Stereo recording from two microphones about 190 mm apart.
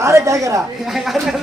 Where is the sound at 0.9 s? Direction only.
Centre (ahead or behind).